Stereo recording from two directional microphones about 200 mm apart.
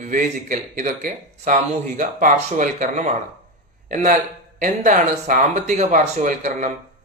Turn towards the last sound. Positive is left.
turn(degrees=-40)  # may be behind; listen again after turning